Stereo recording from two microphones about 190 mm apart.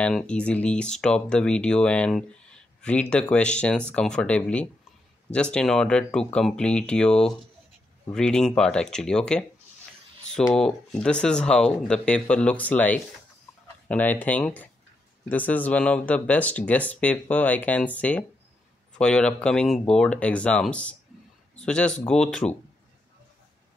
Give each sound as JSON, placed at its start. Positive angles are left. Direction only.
{"t": 0.0, "sound": "speech", "side_deg": 5}